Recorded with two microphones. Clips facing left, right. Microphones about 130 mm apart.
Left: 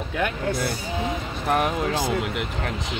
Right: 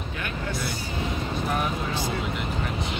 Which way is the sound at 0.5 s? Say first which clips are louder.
Left 5 dB; 55° left (ahead or behind).